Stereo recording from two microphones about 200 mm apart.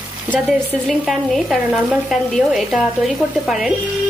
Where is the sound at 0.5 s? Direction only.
Centre (ahead or behind).